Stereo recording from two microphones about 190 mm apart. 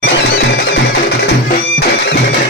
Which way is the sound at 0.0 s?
75° left (ahead or behind).